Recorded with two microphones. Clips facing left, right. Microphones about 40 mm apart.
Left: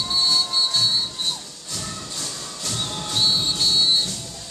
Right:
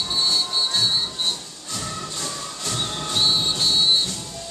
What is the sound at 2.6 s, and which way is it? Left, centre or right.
Whistle, centre.